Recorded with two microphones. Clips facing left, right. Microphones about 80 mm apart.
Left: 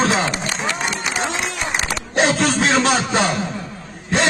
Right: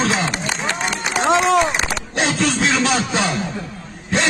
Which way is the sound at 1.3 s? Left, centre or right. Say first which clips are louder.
Right 11 dB; right.